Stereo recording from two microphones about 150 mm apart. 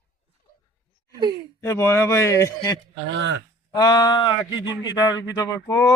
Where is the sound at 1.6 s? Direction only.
20° left (ahead or behind).